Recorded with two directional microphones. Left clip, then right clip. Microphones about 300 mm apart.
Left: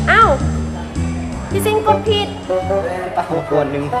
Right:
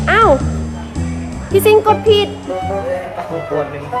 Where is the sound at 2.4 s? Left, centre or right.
Centre.